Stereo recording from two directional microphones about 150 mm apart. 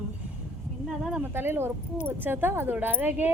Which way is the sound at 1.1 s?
10° right (ahead or behind).